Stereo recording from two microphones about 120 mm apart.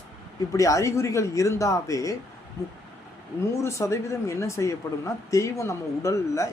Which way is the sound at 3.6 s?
25° left (ahead or behind).